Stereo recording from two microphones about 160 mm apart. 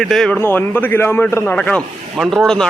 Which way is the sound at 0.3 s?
15° left (ahead or behind).